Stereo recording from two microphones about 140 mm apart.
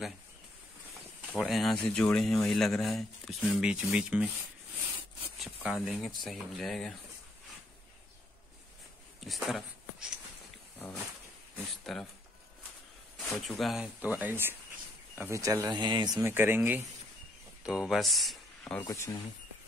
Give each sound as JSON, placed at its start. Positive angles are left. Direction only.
{"t": 1.4, "sound": "speech", "side_deg": 0}
{"t": 5.4, "sound": "speech", "side_deg": -10}
{"t": 9.2, "sound": "speech", "side_deg": 0}
{"t": 11.8, "sound": "speech", "side_deg": 0}
{"t": 13.2, "sound": "speech", "side_deg": 0}
{"t": 16.2, "sound": "speech", "side_deg": -15}
{"t": 18.9, "sound": "speech", "side_deg": 25}